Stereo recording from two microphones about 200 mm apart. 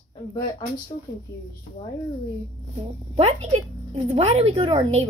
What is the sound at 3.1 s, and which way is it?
A woman's voice, 30° right (ahead or behind).